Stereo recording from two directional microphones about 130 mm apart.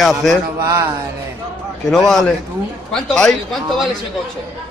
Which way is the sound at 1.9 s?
5° left (ahead or behind).